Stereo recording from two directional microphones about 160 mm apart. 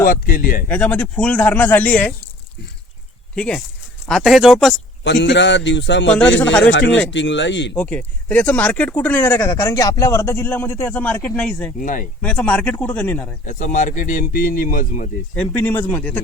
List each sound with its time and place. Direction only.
0.0 s speech: 65° left (ahead or behind)
0.7 s speech: 10° left (ahead or behind)
3.3 s speech: 5° left (ahead or behind)
5.0 s a man's voice: 90° left
6.1 s speech: 5° left (ahead or behind)
7.4 s a man's voice: 90° left
7.8 s speech: 10° left (ahead or behind)
11.8 s speech: 55° left (ahead or behind)
12.2 s speech: 10° left (ahead or behind)
13.4 s speech: 50° left (ahead or behind)
15.4 s speech: 10° left (ahead or behind)